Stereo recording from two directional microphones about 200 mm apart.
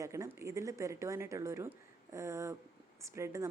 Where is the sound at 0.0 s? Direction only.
15° right (ahead or behind).